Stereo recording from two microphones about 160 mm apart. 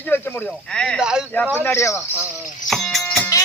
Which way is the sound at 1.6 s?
15° left (ahead or behind).